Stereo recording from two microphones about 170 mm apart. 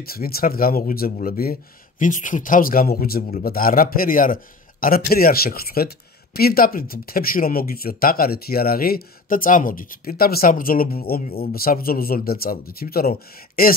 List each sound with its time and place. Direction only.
0.0 s speech: 60° left (ahead or behind)